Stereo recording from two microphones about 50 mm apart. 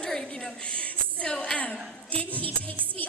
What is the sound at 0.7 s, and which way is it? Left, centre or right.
A woman's voice, left.